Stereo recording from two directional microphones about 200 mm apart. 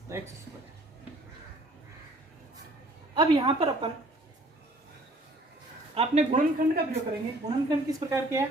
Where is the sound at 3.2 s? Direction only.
20° right (ahead or behind).